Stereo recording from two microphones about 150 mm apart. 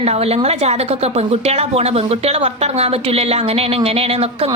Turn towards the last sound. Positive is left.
turn(degrees=-40)  # may be behind; listen again after turning